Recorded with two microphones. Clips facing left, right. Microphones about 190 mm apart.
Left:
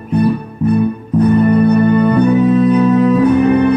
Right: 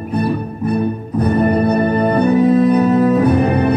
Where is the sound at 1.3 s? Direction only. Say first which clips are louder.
Left 3 dB; 35° right (ahead or behind).